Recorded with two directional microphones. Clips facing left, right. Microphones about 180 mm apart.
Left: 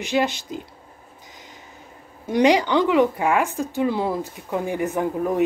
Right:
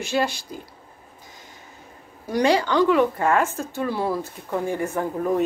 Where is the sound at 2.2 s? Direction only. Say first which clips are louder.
Left 3 dB; 20° left (ahead or behind).